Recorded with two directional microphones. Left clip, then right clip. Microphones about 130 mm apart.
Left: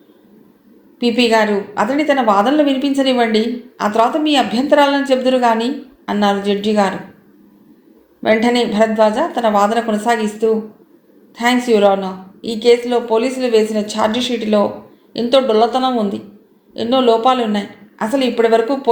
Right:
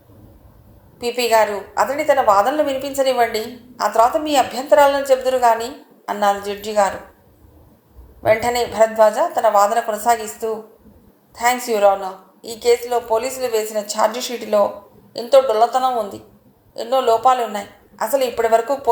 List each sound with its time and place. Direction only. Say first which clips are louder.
0.9 s a woman's voice: left 2 dB; 45° right (ahead or behind)
8.2 s a woman's voice: left 2 dB; 45° right (ahead or behind)